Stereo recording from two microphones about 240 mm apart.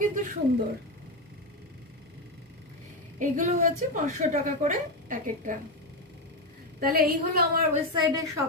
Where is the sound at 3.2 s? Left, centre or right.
Right.